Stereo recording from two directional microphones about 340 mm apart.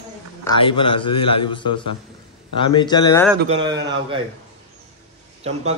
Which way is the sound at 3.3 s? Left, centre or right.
Right.